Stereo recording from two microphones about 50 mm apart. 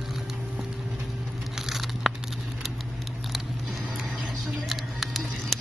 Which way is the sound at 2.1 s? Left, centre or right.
Centre.